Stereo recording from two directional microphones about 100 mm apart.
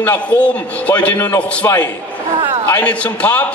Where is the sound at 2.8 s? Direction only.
15° left (ahead or behind).